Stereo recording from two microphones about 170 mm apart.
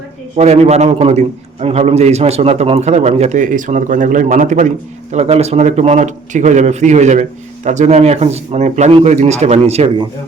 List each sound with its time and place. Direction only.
0.3 s a man's voice: 40° right (ahead or behind)